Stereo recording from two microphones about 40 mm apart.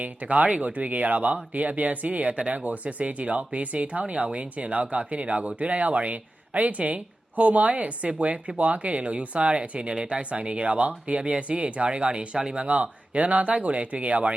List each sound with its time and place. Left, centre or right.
0.0 s speech: right
12.6 s speech: right